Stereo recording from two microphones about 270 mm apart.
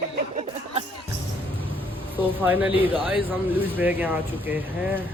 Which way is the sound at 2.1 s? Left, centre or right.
Centre.